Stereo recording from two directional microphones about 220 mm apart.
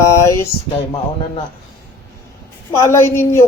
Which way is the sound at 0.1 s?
15° left (ahead or behind).